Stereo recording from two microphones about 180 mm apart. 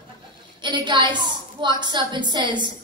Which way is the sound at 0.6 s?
25° right (ahead or behind).